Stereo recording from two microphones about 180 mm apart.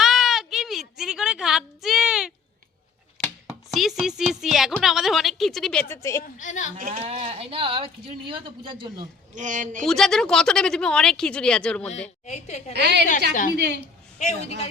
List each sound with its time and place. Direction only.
0.0 s a sound: centre (ahead or behind)
4.3 s speech: centre (ahead or behind)
5.9 s a woman's voice: 15° left (ahead or behind)
6.2 s speech: 45° left (ahead or behind)
6.7 s speech: 50° right (ahead or behind)
7.0 s speech: 30° right (ahead or behind)
9.3 s speech: 45° right (ahead or behind)
9.8 s speech: centre (ahead or behind)
12.2 s a woman's voice: 40° left (ahead or behind)
12.7 s a woman's voice: 65° right (ahead or behind)
14.2 s a woman's voice: 40° left (ahead or behind)